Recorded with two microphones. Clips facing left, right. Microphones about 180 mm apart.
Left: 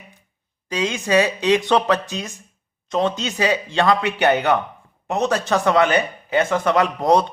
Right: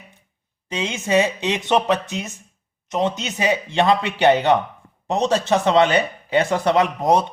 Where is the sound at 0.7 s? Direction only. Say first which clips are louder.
Left 1 dB; 25° right (ahead or behind).